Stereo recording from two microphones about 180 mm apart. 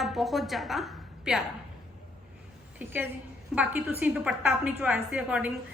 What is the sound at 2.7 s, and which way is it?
A woman's voice, 10° right (ahead or behind).